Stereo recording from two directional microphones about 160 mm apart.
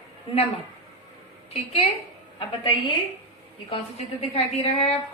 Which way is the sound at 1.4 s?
35° left (ahead or behind).